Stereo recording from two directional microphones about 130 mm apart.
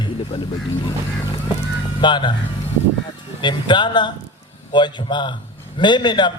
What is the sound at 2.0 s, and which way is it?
Speech, 35° left (ahead or behind).